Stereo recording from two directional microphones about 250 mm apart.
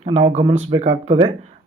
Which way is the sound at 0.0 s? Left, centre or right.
Right.